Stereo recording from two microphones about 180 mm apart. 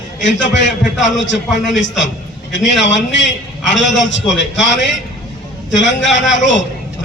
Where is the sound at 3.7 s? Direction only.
90° left.